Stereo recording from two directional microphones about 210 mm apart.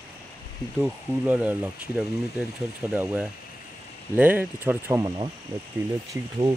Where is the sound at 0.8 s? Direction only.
5° right (ahead or behind).